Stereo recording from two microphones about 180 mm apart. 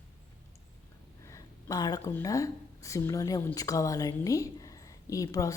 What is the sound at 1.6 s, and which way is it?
A woman's voice, 20° left (ahead or behind).